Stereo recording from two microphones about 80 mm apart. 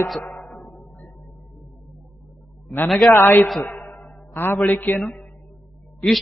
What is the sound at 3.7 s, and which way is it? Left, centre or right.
Music, centre.